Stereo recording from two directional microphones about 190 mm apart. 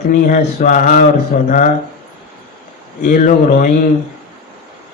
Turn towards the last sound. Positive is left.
turn(degrees=45)  # may be behind; listen again after turning